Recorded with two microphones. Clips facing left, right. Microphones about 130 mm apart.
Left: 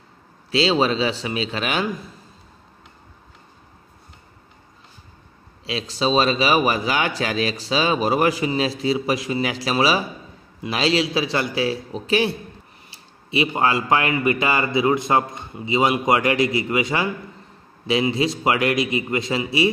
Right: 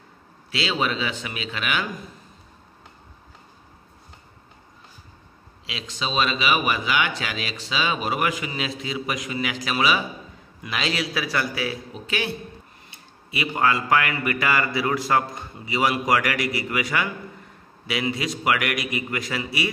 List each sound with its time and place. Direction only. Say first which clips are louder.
0.5 s speech: left 7 dB; 30° left (ahead or behind)
5.7 s a man's voice: left 9 dB; 35° left (ahead or behind)